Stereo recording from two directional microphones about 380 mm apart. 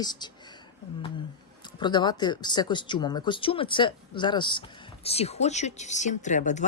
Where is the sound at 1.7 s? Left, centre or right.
Centre.